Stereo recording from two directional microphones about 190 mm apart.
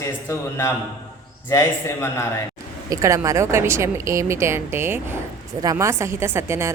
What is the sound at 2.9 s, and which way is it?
A woman's voice, 15° right (ahead or behind).